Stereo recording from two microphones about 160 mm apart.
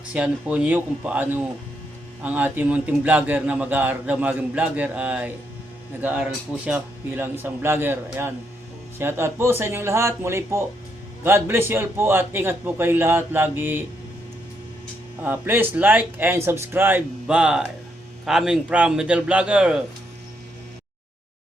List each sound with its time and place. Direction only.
0.1 s a man's voice: 5° right (ahead or behind)
15.2 s a man's voice: 10° right (ahead or behind)